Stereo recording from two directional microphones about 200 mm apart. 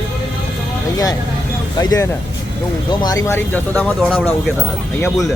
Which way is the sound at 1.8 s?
20° left (ahead or behind).